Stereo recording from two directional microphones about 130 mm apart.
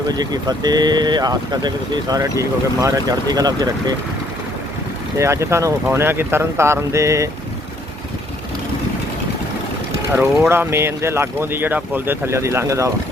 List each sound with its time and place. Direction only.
0.1 s speech: 30° right (ahead or behind)
5.1 s speech: 20° right (ahead or behind)
10.5 s speech: 20° right (ahead or behind)